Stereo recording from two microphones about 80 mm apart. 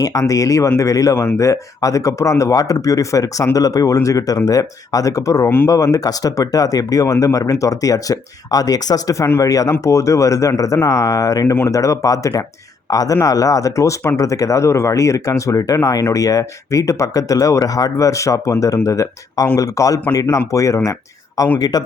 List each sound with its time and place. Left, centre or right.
0.0 s speech: left
21.6 s speech: left